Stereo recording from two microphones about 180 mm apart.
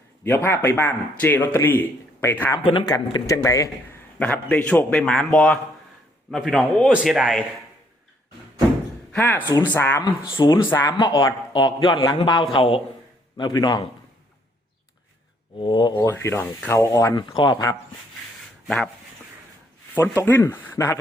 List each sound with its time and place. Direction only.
0.3 s a man's voice: 15° left (ahead or behind)
2.6 s speech: 25° left (ahead or behind)
4.2 s a man's voice: 5° left (ahead or behind)
6.9 s a man's voice: 5° right (ahead or behind)
9.1 s a man's voice: 10° left (ahead or behind)
10.0 s a man's voice: 20° left (ahead or behind)
15.5 s a man's voice: 25° left (ahead or behind)
19.9 s a man's voice: 15° left (ahead or behind)